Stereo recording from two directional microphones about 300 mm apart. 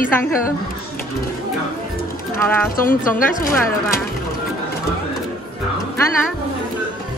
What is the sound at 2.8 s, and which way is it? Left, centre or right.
Speech, left.